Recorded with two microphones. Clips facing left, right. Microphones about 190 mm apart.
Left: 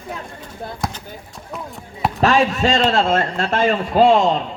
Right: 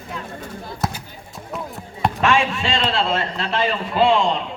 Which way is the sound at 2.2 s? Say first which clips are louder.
Left 4 dB; 40° left (ahead or behind).